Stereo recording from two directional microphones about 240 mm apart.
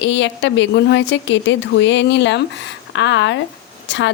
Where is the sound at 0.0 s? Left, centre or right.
Left.